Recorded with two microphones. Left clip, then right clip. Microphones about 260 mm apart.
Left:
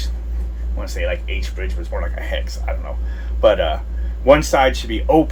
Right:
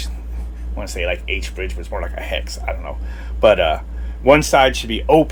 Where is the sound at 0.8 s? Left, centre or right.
Right.